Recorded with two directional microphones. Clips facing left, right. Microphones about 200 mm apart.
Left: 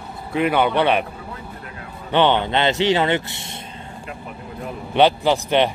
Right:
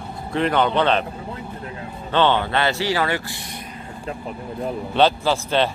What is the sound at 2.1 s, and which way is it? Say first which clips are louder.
Speech: left 1 dB; 15° left (ahead or behind).